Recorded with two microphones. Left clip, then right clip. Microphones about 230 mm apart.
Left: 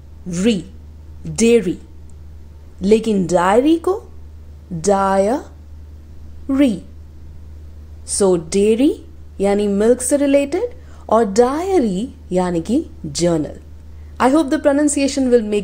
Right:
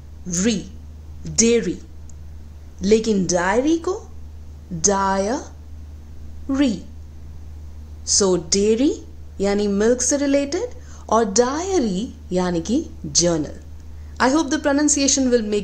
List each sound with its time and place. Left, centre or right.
0.3 s speech: centre
2.8 s a woman's voice: centre
8.0 s speech: centre